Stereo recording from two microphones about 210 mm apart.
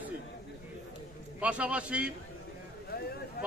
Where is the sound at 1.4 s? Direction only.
5° right (ahead or behind).